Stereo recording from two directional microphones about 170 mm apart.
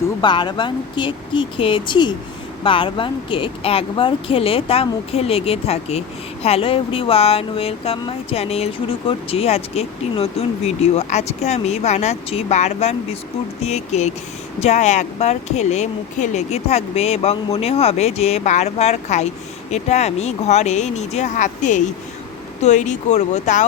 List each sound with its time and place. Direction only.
0.2 s speech: 25° left (ahead or behind); by 23.6 s 45° left (ahead or behind)